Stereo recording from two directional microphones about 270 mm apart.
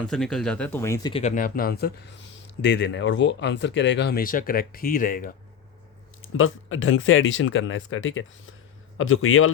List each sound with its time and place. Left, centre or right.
0.0 s speech: centre; by 5.3 s left
6.3 s speech: left